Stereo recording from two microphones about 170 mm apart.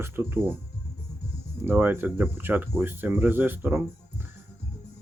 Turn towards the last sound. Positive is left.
turn(degrees=-10)  # may be behind; listen again after turning